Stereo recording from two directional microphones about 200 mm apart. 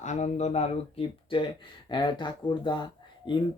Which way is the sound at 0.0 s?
35° left (ahead or behind).